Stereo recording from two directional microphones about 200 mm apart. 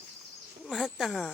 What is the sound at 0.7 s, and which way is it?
Speech, centre (ahead or behind).